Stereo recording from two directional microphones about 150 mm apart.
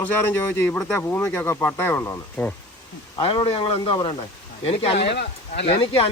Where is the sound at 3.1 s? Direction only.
30° left (ahead or behind).